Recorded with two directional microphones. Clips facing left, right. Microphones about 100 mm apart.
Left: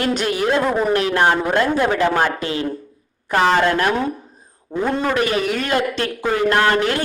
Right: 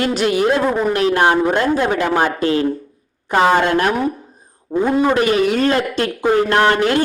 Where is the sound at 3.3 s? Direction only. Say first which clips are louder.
Right 2 dB; 15° right (ahead or behind).